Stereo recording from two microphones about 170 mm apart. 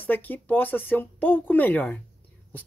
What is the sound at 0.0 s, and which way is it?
Speech, 10° left (ahead or behind).